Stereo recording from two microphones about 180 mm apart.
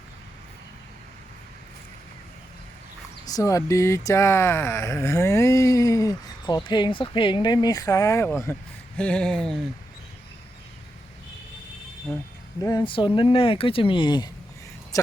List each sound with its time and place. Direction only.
3.2 s speech: 20° left (ahead or behind); by 9.6 s 5° left (ahead or behind)
12.6 s speech: 25° left (ahead or behind)